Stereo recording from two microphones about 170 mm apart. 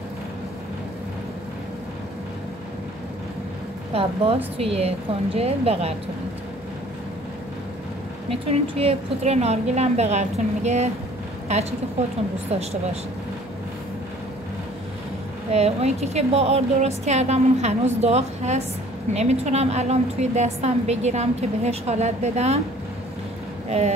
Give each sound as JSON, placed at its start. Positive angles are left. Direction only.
{"t": 3.9, "sound": "a woman's voice", "side_deg": -35}
{"t": 8.3, "sound": "a woman's voice", "side_deg": -35}
{"t": 12.4, "sound": "a woman's voice", "side_deg": -40}
{"t": 15.5, "sound": "a woman's voice", "side_deg": -40}